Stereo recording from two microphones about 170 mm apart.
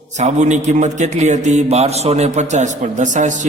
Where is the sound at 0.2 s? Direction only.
45° right (ahead or behind).